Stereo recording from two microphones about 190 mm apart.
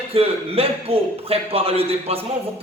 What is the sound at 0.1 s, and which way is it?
A man's voice, 30° right (ahead or behind).